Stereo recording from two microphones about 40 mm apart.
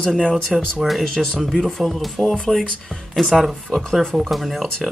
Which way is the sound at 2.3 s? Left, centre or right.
Centre.